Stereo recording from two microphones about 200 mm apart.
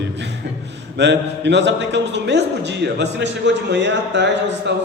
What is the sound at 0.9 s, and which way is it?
Speech, 60° right (ahead or behind).